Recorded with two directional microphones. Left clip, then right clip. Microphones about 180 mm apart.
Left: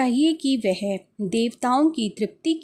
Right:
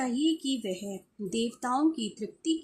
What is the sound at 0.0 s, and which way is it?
A woman's voice, 45° left (ahead or behind).